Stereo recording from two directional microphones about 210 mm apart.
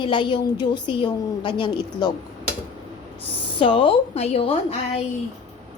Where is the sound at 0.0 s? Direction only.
20° left (ahead or behind).